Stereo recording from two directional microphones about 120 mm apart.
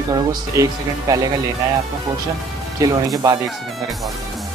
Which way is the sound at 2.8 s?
30° right (ahead or behind).